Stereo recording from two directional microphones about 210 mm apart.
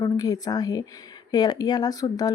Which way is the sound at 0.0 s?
20° left (ahead or behind).